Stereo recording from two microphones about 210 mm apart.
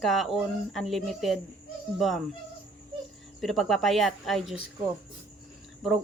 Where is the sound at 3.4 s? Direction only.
Centre (ahead or behind).